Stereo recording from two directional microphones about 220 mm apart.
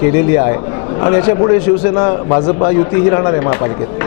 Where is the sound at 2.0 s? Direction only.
25° left (ahead or behind).